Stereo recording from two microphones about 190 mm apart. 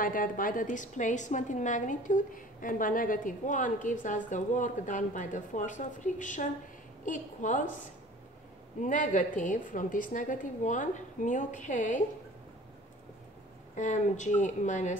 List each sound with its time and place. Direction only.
0.0 s a woman's voice: 45° left (ahead or behind)
8.8 s a woman's voice: 40° left (ahead or behind)
13.7 s a woman's voice: 40° left (ahead or behind)